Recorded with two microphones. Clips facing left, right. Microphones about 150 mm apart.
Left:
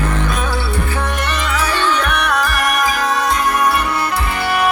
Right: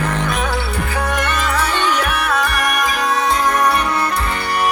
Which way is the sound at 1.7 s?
15° right (ahead or behind).